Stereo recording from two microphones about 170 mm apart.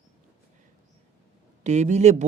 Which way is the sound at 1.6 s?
40° right (ahead or behind).